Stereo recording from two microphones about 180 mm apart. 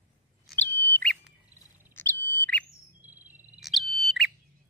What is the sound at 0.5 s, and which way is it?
Bird, 10° left (ahead or behind).